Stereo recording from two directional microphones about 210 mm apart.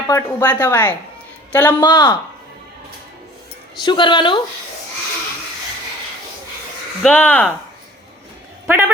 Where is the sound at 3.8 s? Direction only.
20° left (ahead or behind).